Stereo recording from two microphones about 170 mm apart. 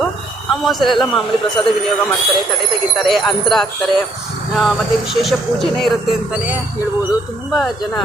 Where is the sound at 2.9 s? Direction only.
Centre (ahead or behind).